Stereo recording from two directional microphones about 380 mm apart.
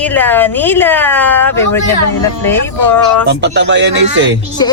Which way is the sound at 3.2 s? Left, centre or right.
Right.